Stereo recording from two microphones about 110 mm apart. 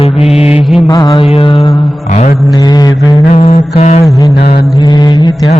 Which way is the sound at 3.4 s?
70° left (ahead or behind).